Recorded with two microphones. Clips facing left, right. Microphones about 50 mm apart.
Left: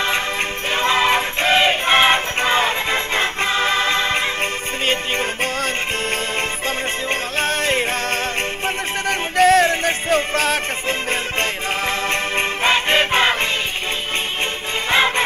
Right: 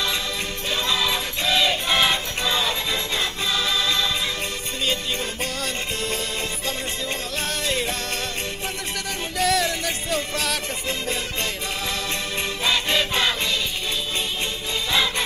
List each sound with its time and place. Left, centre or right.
0.7 s music: left
7.1 s music: left
9.4 s music: left
14.9 s music: left